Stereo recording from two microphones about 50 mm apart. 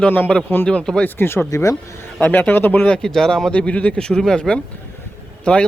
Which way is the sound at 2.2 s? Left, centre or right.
Left.